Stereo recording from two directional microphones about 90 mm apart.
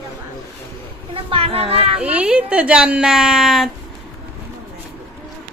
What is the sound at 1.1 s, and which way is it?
Speech, 90° right.